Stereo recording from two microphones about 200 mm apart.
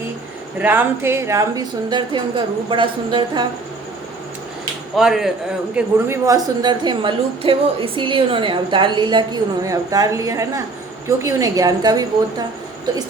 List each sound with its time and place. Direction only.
0.6 s a woman's voice: 10° right (ahead or behind); by 3.4 s 25° right (ahead or behind)
4.9 s speech: centre (ahead or behind)
5.7 s a woman's voice: 15° right (ahead or behind)